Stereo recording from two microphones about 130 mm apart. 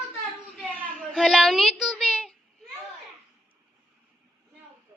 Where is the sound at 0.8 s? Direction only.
90° right.